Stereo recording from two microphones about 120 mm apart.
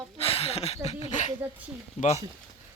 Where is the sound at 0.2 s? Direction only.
55° left (ahead or behind); by 1.3 s 75° left (ahead or behind).